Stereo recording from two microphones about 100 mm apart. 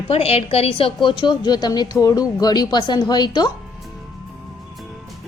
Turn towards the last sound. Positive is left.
turn(degrees=50)  # may be behind; listen again after turning